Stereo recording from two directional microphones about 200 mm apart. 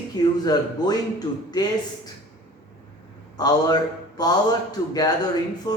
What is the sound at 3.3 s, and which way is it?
A man's voice, 20° left (ahead or behind).